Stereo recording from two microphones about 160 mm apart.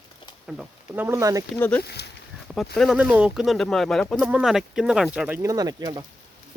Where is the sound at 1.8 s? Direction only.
90° left.